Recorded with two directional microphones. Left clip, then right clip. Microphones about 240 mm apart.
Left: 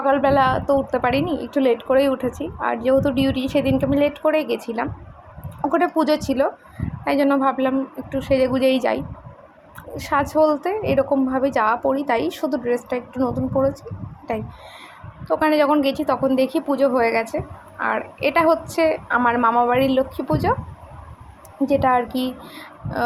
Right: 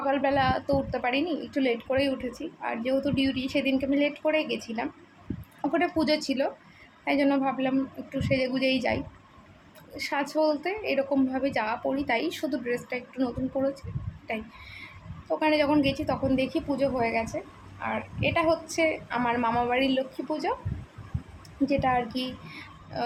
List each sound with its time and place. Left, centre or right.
0.0 s a woman's voice: centre
15.3 s a woman's voice: centre
21.7 s a woman's voice: centre